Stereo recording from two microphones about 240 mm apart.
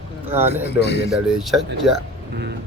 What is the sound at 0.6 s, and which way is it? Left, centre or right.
Speech, left.